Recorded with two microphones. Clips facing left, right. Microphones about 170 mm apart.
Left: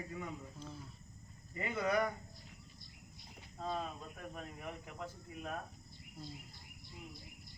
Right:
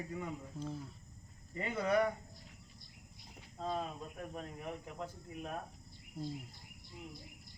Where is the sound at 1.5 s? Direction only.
35° right (ahead or behind).